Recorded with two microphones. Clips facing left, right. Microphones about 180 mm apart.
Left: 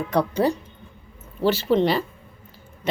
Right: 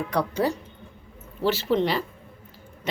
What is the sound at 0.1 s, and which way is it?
Speech, 25° left (ahead or behind).